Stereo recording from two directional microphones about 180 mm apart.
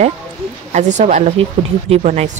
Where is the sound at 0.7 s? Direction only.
40° right (ahead or behind).